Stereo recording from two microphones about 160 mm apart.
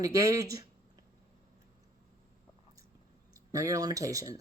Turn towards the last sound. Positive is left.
turn(degrees=-20)  # may be behind; listen again after turning